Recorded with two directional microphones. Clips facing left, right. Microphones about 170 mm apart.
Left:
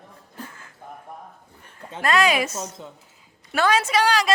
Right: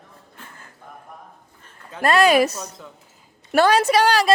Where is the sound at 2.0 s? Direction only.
35° right (ahead or behind).